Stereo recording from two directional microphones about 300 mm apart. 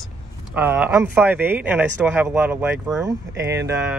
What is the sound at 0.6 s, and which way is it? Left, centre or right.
Speech, centre.